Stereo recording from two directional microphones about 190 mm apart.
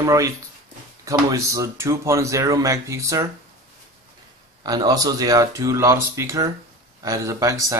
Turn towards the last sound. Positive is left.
turn(degrees=-15)  # may be behind; listen again after turning